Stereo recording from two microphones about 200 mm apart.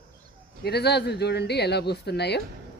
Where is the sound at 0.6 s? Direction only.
55° left (ahead or behind).